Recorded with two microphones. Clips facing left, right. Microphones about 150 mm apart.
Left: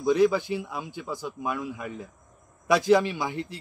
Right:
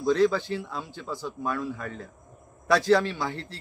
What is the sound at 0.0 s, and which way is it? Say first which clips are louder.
A man's voice: left 1 dB; 15° left (ahead or behind).